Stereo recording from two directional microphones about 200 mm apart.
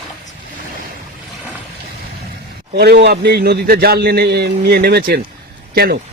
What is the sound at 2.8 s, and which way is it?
A man's voice, 50° right (ahead or behind).